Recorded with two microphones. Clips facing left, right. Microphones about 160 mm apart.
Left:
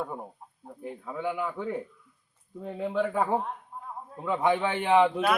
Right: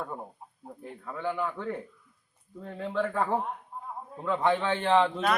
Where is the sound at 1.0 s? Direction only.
10° left (ahead or behind).